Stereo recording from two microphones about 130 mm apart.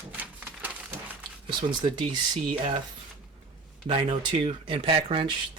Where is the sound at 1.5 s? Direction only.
40° right (ahead or behind).